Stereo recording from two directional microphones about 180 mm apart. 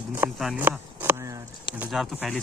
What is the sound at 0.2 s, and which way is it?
Speech, 10° right (ahead or behind).